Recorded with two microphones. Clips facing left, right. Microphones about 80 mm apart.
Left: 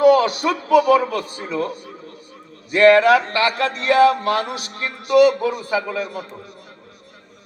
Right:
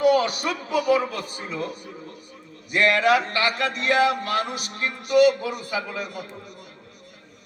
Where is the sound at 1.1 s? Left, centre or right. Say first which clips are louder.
Left 7 dB; left.